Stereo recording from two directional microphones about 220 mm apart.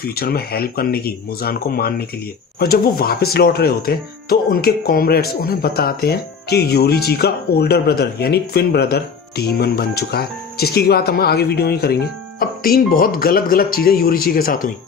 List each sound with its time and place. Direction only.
0.0 s speech: 45° left (ahead or behind)